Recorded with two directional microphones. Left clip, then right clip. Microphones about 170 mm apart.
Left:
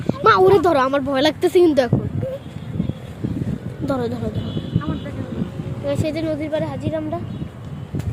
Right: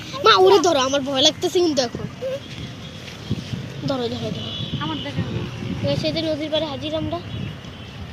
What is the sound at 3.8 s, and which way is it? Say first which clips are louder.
Speech: left 2 dB; 25° left (ahead or behind).